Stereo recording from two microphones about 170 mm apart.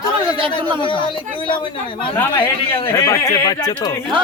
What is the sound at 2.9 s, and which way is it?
Speech, 20° left (ahead or behind).